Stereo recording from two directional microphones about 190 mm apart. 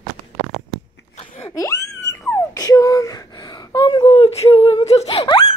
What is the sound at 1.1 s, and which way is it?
Sneeze, 30° left (ahead or behind).